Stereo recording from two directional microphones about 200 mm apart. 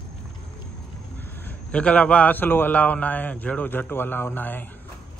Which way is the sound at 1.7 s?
5° left (ahead or behind).